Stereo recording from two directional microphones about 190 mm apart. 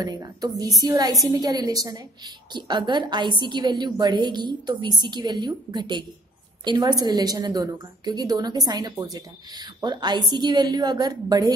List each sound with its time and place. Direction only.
0.0 s a woman's voice: 20° right (ahead or behind)